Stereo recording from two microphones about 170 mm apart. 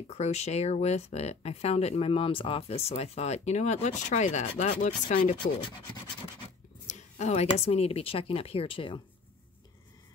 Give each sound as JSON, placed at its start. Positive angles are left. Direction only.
{"t": 0.0, "sound": "speech", "side_deg": 40}
{"t": 6.9, "sound": "speech", "side_deg": 40}